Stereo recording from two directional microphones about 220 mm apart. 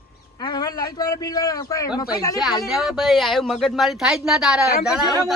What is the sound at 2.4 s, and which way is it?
Speech, centre (ahead or behind).